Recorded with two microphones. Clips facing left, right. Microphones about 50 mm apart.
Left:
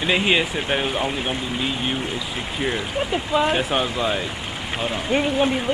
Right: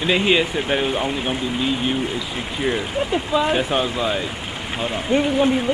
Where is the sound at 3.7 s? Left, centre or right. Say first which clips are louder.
Right 1 dB; centre.